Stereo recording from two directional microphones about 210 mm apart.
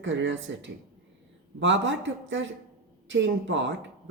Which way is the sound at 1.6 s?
60° right (ahead or behind).